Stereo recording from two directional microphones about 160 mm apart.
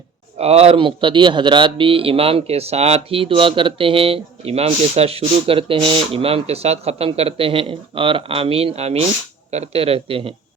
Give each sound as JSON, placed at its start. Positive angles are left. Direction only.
{"t": 0.3, "sound": "speech", "side_deg": -40}